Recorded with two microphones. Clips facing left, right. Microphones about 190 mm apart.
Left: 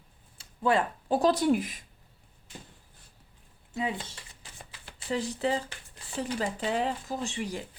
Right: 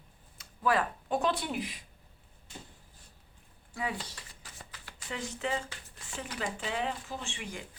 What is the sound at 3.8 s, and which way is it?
Speech, 25° left (ahead or behind).